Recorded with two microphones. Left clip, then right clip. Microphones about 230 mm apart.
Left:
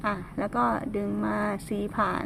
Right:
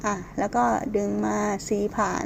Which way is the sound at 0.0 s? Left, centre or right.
Left.